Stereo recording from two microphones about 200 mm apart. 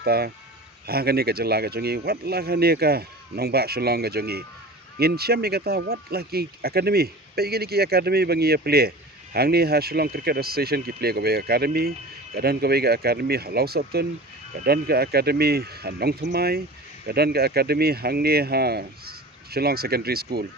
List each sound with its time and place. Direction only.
0.0 s speech: 50° right (ahead or behind)